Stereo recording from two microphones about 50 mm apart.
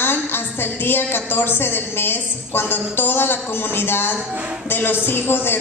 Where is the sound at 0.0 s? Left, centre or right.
Left.